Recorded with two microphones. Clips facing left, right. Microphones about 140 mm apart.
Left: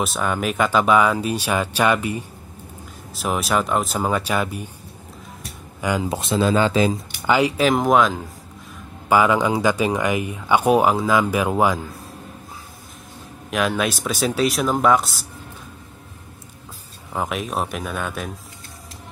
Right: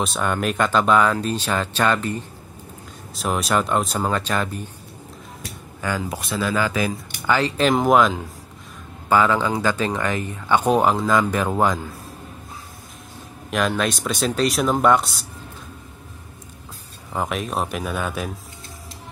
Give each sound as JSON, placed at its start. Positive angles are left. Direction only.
{"t": 0.0, "sound": "speech", "side_deg": 0}
{"t": 5.8, "sound": "speech", "side_deg": 15}
{"t": 7.3, "sound": "speech", "side_deg": 10}
{"t": 9.1, "sound": "speech", "side_deg": 15}
{"t": 13.5, "sound": "speech", "side_deg": 5}
{"t": 17.1, "sound": "speech", "side_deg": 0}